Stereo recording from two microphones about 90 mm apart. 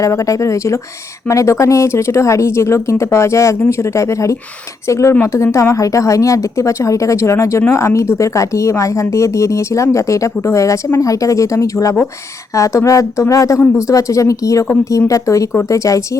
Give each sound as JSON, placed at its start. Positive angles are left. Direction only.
{"t": 0.0, "sound": "a woman's voice", "side_deg": 35}